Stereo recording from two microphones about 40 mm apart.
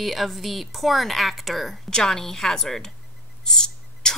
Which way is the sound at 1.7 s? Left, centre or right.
Centre.